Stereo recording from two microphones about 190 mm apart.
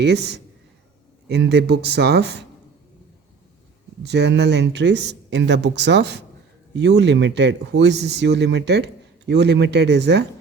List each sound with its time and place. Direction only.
0.0 s speech: 60° right (ahead or behind)
4.0 s speech: 60° right (ahead or behind)